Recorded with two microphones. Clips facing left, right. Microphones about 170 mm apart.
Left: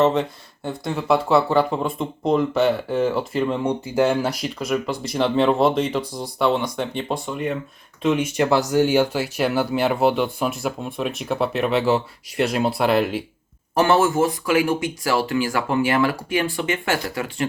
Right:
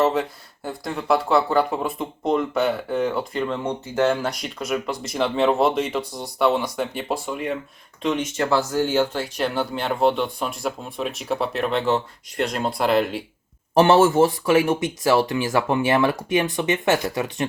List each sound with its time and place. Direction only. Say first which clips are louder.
0.0 s speech: left 2 dB; centre (ahead or behind)
8.0 s speech: left 3 dB; 10° left (ahead or behind)
13.7 s speech: right 3 dB; 30° right (ahead or behind)